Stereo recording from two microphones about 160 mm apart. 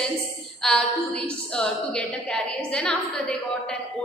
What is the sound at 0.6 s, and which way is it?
A woman's voice, 5° left (ahead or behind).